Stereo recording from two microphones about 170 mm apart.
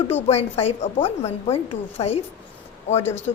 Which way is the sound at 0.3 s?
40° left (ahead or behind).